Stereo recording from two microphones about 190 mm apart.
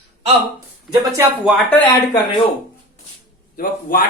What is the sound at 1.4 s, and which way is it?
Speech, centre (ahead or behind).